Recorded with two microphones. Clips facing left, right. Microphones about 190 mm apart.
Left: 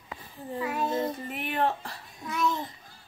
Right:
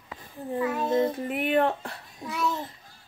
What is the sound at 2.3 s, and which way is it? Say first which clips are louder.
Speech: left 1 dB; 5° right (ahead or behind).